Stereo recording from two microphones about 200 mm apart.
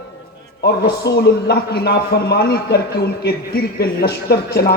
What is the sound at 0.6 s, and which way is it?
Speech, 55° left (ahead or behind).